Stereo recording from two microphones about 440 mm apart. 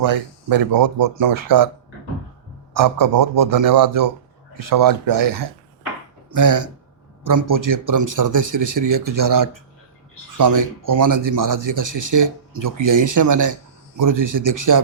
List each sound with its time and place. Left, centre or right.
0.0 s speech: right
2.7 s speech: right